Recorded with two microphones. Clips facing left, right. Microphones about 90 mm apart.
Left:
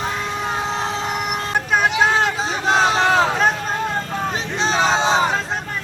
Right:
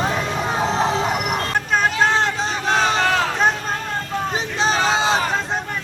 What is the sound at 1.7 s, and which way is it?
Vehicle, 10° left (ahead or behind).